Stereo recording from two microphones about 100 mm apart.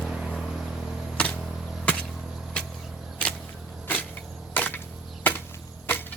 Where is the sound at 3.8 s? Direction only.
20° left (ahead or behind).